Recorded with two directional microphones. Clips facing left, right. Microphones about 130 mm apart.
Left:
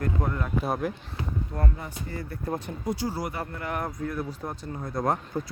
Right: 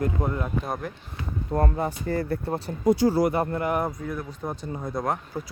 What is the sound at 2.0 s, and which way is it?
Speech, 65° right (ahead or behind).